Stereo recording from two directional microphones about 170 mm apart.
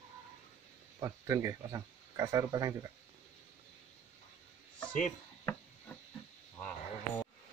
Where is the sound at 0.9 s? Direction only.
20° right (ahead or behind).